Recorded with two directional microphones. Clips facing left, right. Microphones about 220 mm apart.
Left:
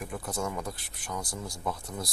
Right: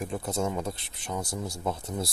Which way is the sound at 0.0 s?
25° right (ahead or behind).